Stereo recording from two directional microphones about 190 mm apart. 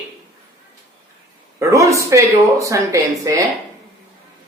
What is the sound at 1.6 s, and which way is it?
Speech, 15° right (ahead or behind).